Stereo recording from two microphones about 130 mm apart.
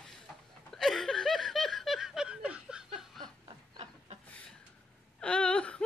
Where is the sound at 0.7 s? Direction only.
Centre (ahead or behind).